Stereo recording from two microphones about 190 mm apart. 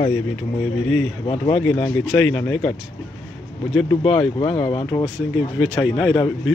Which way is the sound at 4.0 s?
30° left (ahead or behind).